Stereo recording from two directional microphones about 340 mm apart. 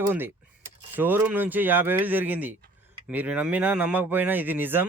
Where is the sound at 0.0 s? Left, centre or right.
Centre.